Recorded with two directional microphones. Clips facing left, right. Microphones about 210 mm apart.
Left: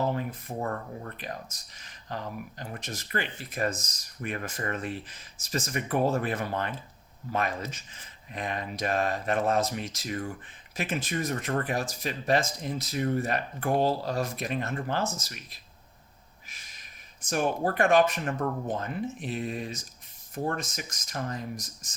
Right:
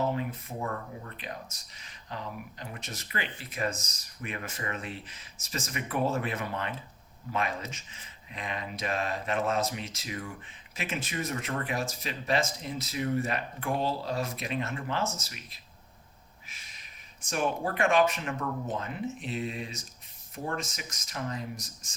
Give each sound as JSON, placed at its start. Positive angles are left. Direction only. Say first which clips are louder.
{"t": 0.1, "sound": "speech", "louder": "left 1 dB", "side_deg": 40}
{"t": 17.2, "sound": "speech", "louder": "left 3 dB", "side_deg": 40}